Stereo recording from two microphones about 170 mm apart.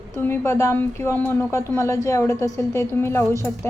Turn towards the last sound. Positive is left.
turn(degrees=15)  # may be behind; listen again after turning